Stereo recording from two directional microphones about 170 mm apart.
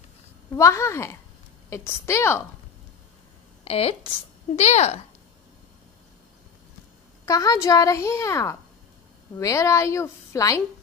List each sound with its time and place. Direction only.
0.6 s a woman's voice: 15° left (ahead or behind)
3.6 s speech: 35° left (ahead or behind)
7.2 s a woman's voice: 20° left (ahead or behind)